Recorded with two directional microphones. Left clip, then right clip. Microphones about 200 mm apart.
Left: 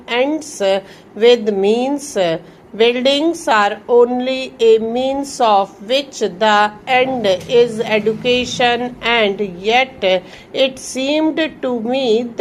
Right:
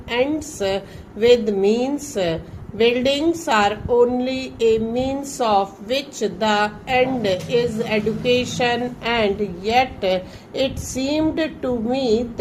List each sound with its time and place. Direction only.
0.1 s a woman's voice: 15° left (ahead or behind)